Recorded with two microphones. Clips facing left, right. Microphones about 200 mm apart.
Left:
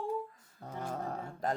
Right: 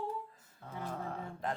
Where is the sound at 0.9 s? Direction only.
40° left (ahead or behind).